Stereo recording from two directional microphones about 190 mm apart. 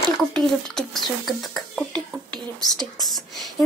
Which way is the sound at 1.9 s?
25° right (ahead or behind).